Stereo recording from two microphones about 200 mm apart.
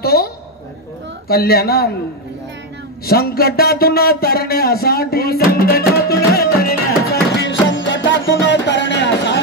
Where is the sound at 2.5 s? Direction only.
65° right (ahead or behind).